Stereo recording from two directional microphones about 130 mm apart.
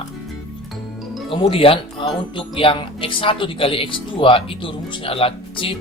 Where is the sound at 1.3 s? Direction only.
45° left (ahead or behind).